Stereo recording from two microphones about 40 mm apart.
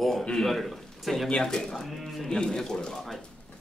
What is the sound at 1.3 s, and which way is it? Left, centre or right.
Speech, centre.